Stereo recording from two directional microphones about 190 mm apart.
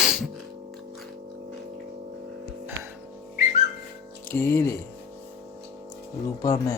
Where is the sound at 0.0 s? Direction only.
5° right (ahead or behind).